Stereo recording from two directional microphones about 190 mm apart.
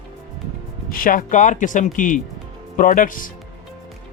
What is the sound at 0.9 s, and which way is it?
Speech, 50° left (ahead or behind).